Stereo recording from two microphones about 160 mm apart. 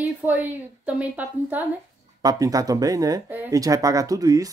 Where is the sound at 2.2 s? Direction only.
25° right (ahead or behind).